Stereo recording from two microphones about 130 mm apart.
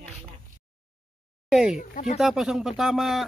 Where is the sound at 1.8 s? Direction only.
60° left (ahead or behind).